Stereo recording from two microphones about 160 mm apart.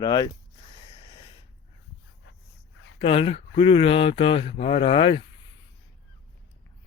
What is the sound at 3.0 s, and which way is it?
Speech, 35° left (ahead or behind).